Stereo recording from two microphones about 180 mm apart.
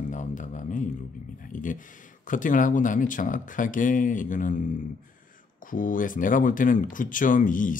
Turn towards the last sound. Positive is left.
turn(degrees=50)  # may be behind; listen again after turning